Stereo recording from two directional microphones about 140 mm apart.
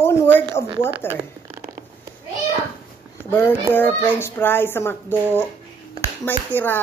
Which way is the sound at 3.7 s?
15° left (ahead or behind).